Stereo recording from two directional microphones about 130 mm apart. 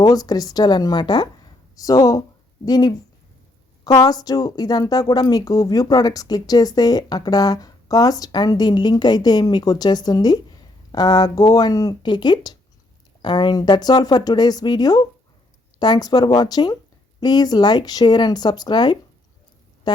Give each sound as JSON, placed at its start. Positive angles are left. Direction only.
{"t": 0.0, "sound": "speech", "side_deg": 30}